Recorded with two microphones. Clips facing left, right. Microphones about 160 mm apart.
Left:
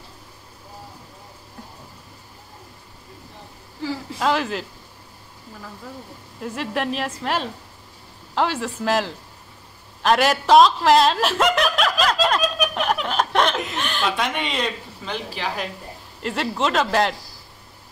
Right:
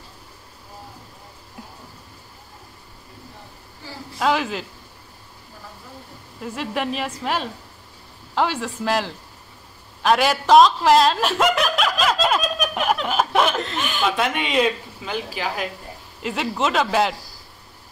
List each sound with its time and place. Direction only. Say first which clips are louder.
4.2 s speech: right 1 dB; centre (ahead or behind)
6.4 s speech: even; centre (ahead or behind)
8.4 s a man's voice: even; centre (ahead or behind)